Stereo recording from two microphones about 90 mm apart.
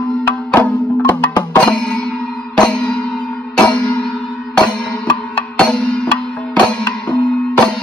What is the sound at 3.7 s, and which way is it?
Music, 15° left (ahead or behind).